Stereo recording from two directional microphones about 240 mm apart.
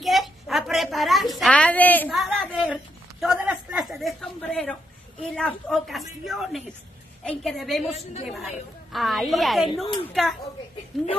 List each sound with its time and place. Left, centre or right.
0.0 s a sound: centre
5.3 s a woman's voice: centre
7.9 s a woman's voice: left
8.9 s a woman's voice: centre